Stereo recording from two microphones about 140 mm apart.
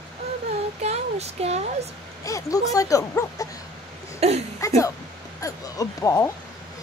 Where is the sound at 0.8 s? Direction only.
50° right (ahead or behind).